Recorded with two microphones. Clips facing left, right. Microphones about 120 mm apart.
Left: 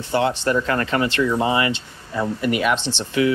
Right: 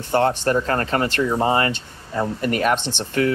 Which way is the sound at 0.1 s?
50° right (ahead or behind).